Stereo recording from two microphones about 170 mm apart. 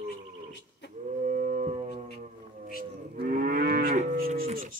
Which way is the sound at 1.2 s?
50° right (ahead or behind).